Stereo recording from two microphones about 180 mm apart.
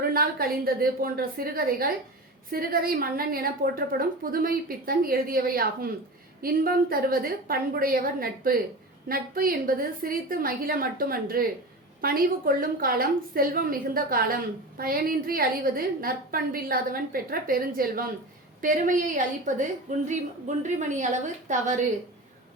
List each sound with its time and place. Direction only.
0.1 s a woman's voice: 55° right (ahead or behind)